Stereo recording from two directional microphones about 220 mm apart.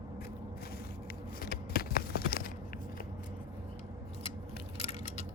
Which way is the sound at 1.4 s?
45° left (ahead or behind).